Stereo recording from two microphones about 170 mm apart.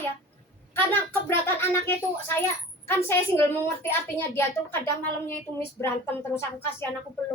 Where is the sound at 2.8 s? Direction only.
15° left (ahead or behind).